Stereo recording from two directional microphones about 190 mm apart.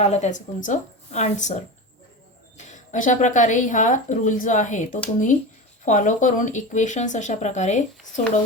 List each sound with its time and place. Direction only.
0.0 s speech: 35° left (ahead or behind)
2.6 s speech: 40° left (ahead or behind)